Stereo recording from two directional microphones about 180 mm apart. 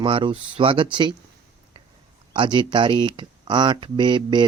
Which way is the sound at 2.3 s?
25° right (ahead or behind).